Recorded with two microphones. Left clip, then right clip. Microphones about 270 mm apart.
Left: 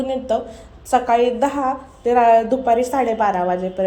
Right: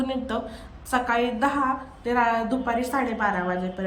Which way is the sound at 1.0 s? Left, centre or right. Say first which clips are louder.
Left 6 dB; centre.